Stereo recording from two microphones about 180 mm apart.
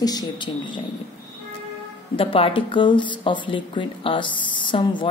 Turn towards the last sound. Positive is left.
turn(degrees=25)  # may be behind; listen again after turning